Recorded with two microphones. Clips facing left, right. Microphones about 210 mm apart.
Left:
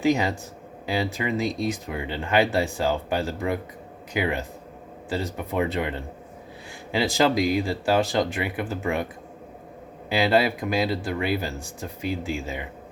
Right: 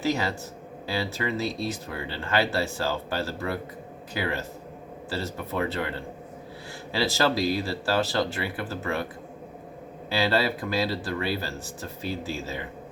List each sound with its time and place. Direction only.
0.0 s speech: 15° left (ahead or behind)
10.1 s speech: 15° left (ahead or behind)